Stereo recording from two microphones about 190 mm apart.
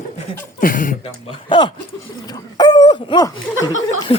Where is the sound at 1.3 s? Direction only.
25° left (ahead or behind).